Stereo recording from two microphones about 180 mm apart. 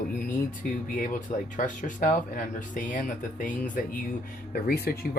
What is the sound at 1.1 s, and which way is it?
Speech, 45° left (ahead or behind).